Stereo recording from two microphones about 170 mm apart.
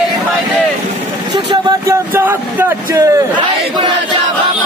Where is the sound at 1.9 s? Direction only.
10° right (ahead or behind).